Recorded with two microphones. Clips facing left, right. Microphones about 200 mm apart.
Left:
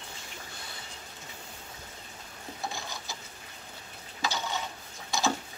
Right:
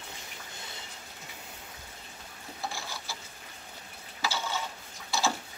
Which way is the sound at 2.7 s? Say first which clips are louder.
Left 1 dB; 15° left (ahead or behind).